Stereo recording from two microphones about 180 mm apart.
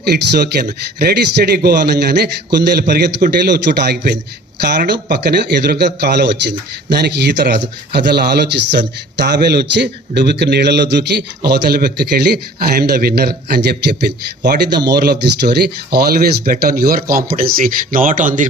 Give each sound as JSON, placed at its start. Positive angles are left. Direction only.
{"t": 0.0, "sound": "speech", "side_deg": -65}